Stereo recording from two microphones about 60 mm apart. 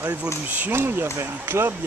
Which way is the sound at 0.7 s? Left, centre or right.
Right.